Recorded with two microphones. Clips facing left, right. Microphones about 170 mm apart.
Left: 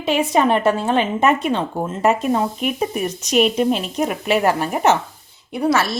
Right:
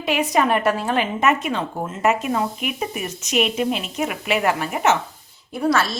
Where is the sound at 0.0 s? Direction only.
25° left (ahead or behind).